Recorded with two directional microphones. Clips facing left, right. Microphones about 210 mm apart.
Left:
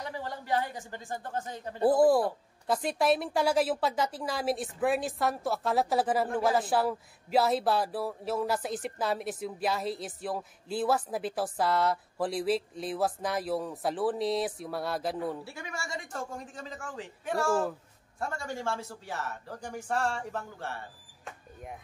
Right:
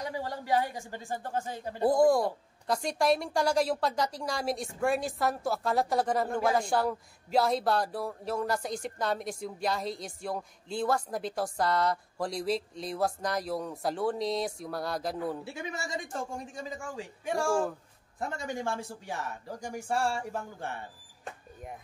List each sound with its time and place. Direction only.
0.0 s a woman's voice: 10° right (ahead or behind)
1.8 s a man's voice: 5° left (ahead or behind)
15.4 s a man's voice: 20° right (ahead or behind)